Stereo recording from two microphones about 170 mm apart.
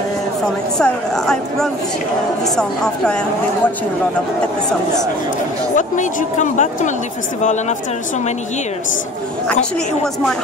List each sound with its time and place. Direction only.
0.7 s speech: 5° left (ahead or behind)
5.8 s speech: 50° left (ahead or behind)